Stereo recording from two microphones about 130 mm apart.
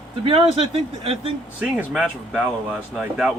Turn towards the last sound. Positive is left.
turn(degrees=-5)  # may be behind; listen again after turning